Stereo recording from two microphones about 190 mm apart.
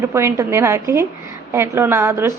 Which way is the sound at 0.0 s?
15° right (ahead or behind).